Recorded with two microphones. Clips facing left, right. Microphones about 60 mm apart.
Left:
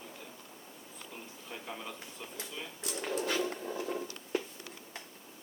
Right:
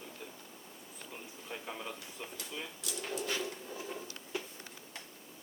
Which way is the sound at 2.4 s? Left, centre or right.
Left.